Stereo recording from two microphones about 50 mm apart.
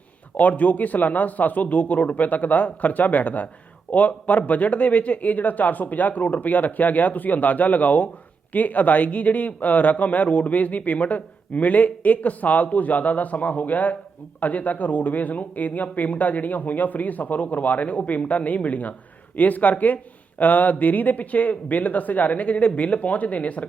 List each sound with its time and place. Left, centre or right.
0.3 s speech: left